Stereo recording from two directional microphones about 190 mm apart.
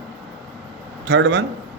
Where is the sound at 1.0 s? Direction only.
65° right (ahead or behind).